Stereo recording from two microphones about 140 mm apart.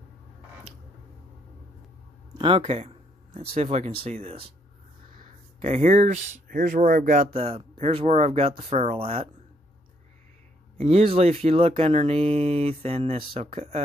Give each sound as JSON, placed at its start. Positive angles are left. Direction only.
{"t": 2.3, "sound": "speech", "side_deg": -40}
{"t": 5.6, "sound": "speech", "side_deg": -55}
{"t": 6.4, "sound": "speech", "side_deg": -80}
{"t": 7.3, "sound": "speech", "side_deg": -45}
{"t": 10.8, "sound": "speech", "side_deg": -45}